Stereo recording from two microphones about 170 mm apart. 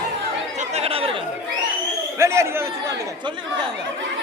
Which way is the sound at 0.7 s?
35° right (ahead or behind).